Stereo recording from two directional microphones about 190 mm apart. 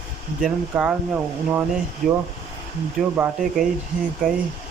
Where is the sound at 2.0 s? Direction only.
45° right (ahead or behind).